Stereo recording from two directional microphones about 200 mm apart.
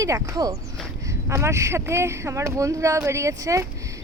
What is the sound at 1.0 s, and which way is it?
Speech, 15° right (ahead or behind).